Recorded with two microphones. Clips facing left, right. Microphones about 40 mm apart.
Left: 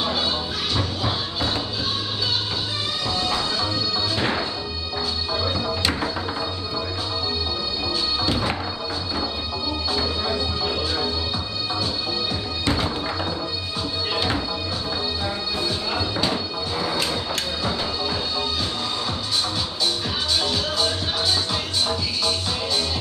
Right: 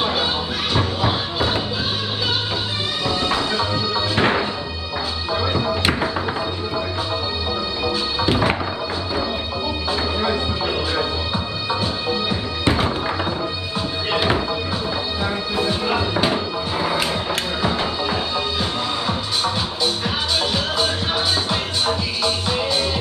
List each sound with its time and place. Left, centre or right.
0.0 s music: right
3.3 s music: right
7.8 s music: right
9.9 s music: right
15.5 s music: right
21.5 s music: right